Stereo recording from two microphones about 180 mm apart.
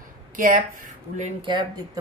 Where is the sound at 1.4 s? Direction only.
25° right (ahead or behind).